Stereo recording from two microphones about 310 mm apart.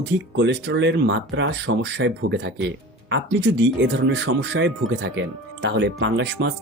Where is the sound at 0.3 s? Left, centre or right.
Right.